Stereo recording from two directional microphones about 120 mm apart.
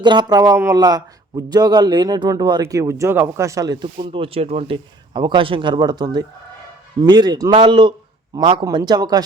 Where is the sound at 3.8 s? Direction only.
45° right (ahead or behind).